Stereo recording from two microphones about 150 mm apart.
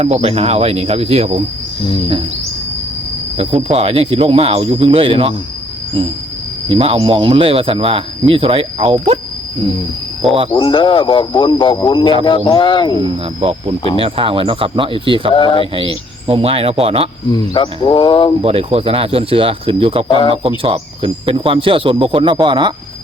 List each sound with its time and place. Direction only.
0.0 s speech: 45° right (ahead or behind)
3.3 s speech: 45° right (ahead or behind)
6.7 s speech: 35° right (ahead or behind)
10.5 s a man's voice: 35° left (ahead or behind)
13.0 s speech: 35° right (ahead or behind)
15.3 s a man's voice: 35° left (ahead or behind)
15.7 s speech: 35° right (ahead or behind)
17.3 s a man's voice: 30° left (ahead or behind)
18.4 s speech: 40° right (ahead or behind)
20.1 s a man's voice: 35° left (ahead or behind)
20.6 s speech: 35° right (ahead or behind)